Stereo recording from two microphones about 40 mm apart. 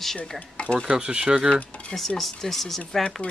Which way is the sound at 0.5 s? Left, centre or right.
Left.